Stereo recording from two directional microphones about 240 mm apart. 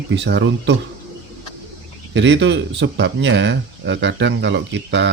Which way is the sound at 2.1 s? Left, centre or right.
Right.